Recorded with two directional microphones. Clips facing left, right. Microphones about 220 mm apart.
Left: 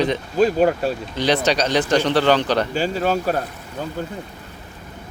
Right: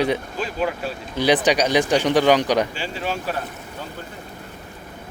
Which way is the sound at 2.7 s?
40° left (ahead or behind).